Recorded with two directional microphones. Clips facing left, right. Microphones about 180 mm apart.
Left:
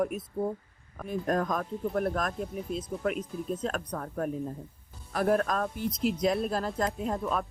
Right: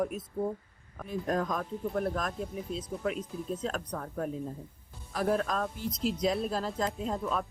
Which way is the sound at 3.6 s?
50° left (ahead or behind).